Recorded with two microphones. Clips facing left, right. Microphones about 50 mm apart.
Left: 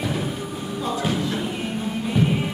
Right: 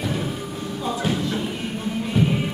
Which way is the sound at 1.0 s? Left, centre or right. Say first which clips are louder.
Even; centre.